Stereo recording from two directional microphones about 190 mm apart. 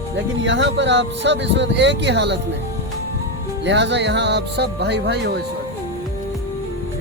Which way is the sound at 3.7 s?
65° right (ahead or behind).